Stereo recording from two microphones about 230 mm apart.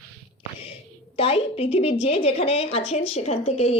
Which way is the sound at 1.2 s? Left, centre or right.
Left.